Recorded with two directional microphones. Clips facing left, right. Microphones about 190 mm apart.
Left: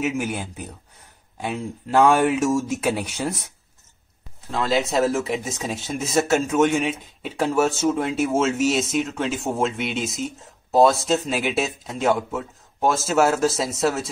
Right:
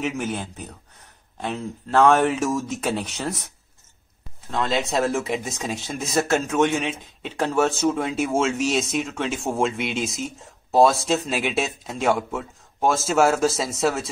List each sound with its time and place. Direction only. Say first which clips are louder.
0.0 s speech: left 2 dB; 10° left (ahead or behind)
4.5 s speech: left 2 dB; 5° left (ahead or behind)